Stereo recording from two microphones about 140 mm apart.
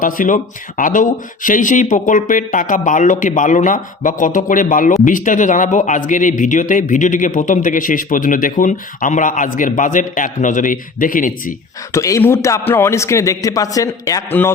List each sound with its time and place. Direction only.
0.0 s a man's voice: 70° left (ahead or behind)
11.9 s a man's voice: 20° left (ahead or behind)
14.3 s a man's voice: 15° left (ahead or behind)